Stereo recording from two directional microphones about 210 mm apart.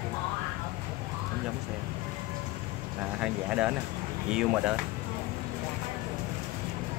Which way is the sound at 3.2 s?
5° right (ahead or behind).